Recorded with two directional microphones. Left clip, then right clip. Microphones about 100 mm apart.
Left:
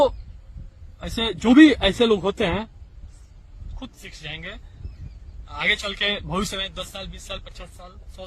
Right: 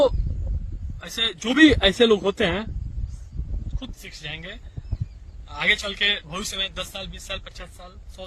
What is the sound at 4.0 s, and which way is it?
Speech, 30° right (ahead or behind).